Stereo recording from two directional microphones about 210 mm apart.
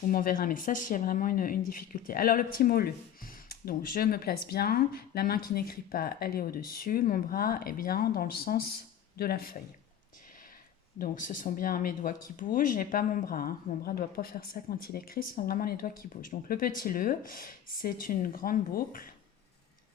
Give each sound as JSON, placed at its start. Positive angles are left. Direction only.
{"t": 0.1, "sound": "speech", "side_deg": 40}
{"t": 10.9, "sound": "speech", "side_deg": 40}